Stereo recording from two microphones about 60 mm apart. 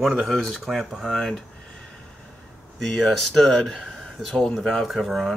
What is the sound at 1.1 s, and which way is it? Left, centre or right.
Speech, centre.